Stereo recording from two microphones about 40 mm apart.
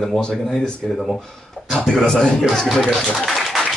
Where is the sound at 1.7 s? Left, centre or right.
Centre.